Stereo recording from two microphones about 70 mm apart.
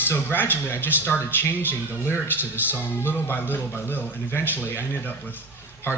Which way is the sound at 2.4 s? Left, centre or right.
Right.